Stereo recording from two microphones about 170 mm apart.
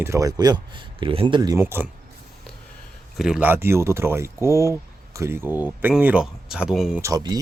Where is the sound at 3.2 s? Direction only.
5° right (ahead or behind).